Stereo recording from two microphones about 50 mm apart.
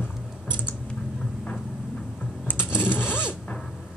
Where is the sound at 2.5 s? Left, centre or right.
Left.